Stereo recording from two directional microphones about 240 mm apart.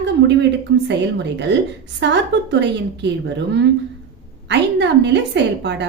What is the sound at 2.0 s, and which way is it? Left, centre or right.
A woman's voice, right.